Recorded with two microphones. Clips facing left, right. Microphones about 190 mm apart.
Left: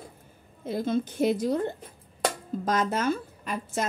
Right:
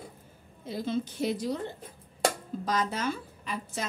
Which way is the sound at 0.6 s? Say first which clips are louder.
Left 4 dB; 50° left (ahead or behind).